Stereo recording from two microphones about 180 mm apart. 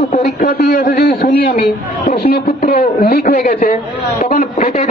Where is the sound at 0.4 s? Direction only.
50° left (ahead or behind).